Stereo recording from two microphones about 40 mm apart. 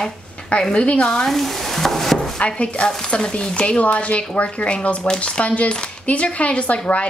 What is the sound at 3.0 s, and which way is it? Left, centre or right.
Speech, left.